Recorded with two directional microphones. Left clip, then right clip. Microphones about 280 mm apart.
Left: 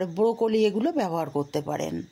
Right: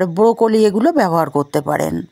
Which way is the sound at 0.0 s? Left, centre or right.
Right.